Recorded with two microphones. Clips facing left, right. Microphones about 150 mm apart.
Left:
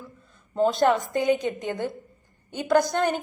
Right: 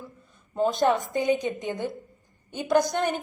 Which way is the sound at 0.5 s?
20° right (ahead or behind).